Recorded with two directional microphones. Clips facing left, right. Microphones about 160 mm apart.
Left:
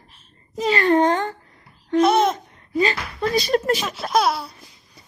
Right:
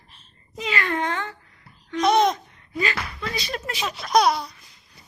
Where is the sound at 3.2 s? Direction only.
45° left (ahead or behind).